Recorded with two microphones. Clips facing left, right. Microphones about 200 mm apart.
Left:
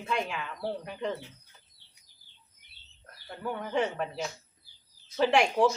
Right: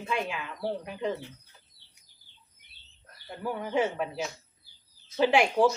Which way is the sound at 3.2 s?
5° right (ahead or behind).